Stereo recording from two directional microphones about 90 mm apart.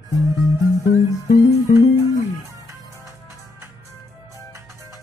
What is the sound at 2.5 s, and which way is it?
Music, 40° right (ahead or behind).